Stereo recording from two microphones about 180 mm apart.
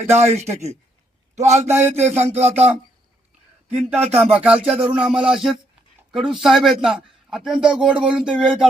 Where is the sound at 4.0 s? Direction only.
35° right (ahead or behind).